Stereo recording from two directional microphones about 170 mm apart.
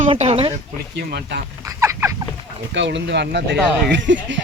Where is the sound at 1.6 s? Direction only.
15° right (ahead or behind).